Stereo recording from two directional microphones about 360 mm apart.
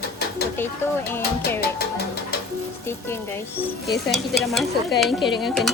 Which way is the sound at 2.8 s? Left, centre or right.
Centre.